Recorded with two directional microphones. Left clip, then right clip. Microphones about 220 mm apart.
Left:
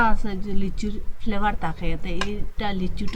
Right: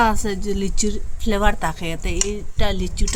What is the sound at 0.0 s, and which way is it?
A woman's voice, 60° right (ahead or behind).